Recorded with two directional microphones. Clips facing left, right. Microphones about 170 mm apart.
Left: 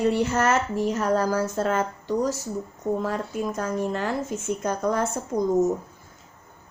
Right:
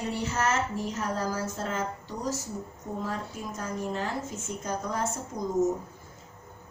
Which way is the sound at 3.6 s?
75° left (ahead or behind).